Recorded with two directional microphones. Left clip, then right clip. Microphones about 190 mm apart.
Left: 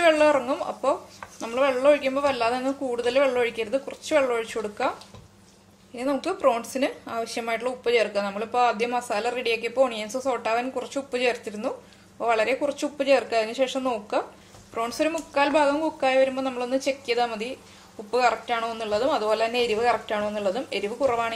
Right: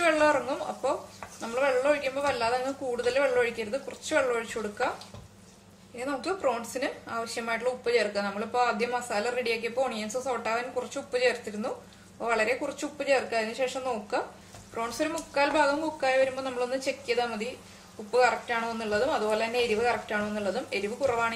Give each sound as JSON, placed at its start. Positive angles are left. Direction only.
{"t": 0.0, "sound": "a woman's voice", "side_deg": 35}
{"t": 5.9, "sound": "a woman's voice", "side_deg": 40}